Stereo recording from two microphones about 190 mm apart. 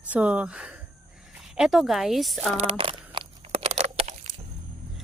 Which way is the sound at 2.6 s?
30° right (ahead or behind).